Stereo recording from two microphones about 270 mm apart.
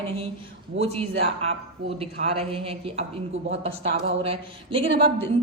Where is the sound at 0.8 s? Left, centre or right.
Right.